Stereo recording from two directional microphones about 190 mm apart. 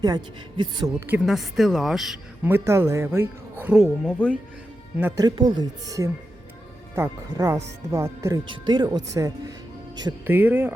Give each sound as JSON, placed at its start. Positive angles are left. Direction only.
{"t": 0.0, "sound": "speech", "side_deg": -20}
{"t": 0.9, "sound": "a woman's voice", "side_deg": -10}
{"t": 4.9, "sound": "a woman's voice", "side_deg": -10}
{"t": 5.2, "sound": "speech", "side_deg": -25}
{"t": 6.9, "sound": "a woman's voice", "side_deg": -15}
{"t": 10.2, "sound": "a woman's voice", "side_deg": -10}